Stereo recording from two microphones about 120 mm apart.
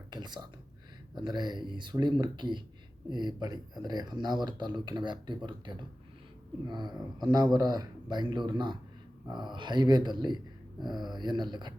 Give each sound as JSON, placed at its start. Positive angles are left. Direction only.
{"t": 0.1, "sound": "speech", "side_deg": -40}
{"t": 6.7, "sound": "speech", "side_deg": -40}
{"t": 10.8, "sound": "speech", "side_deg": 0}
{"t": 11.0, "sound": "speech", "side_deg": -35}